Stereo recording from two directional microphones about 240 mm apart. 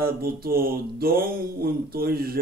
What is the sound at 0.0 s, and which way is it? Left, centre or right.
Speech, right.